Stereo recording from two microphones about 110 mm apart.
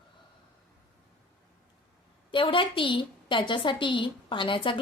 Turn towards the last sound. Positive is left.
turn(degrees=50)  # may be behind; listen again after turning